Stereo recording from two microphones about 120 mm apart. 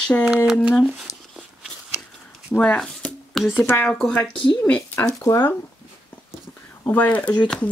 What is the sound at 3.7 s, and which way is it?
Speech, 10° left (ahead or behind).